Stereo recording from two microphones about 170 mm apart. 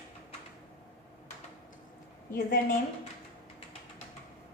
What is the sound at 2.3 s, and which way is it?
Speech, 55° left (ahead or behind).